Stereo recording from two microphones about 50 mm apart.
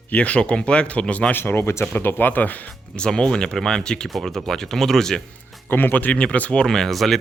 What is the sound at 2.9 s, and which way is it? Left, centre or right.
Speech, centre.